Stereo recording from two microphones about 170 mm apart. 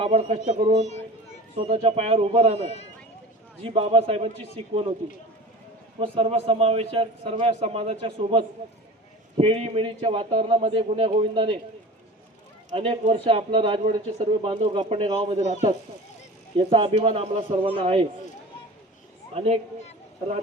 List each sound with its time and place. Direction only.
0.0 s a man's voice: 35° right (ahead or behind)
1.5 s a man's voice: 30° right (ahead or behind)
3.6 s a man's voice: 35° right (ahead or behind)
6.0 s a man's voice: 35° right (ahead or behind)
12.7 s a man's voice: 35° right (ahead or behind)
16.6 s a man's voice: 30° right (ahead or behind)
19.3 s speech: 35° right (ahead or behind)